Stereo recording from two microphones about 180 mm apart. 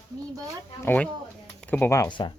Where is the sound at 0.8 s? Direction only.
10° left (ahead or behind); by 2.3 s 25° left (ahead or behind).